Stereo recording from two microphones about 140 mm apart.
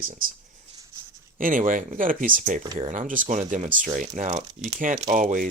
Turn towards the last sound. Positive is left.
turn(degrees=-70)  # may be behind; listen again after turning